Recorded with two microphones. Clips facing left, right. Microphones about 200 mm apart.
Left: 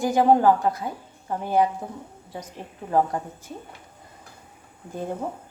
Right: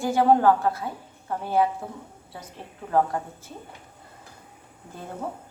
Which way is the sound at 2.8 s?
20° left (ahead or behind).